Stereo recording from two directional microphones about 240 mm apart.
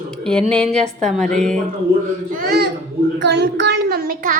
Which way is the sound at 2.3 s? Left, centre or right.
Right.